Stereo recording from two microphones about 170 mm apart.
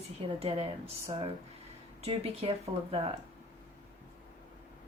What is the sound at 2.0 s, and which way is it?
Speech, 35° right (ahead or behind).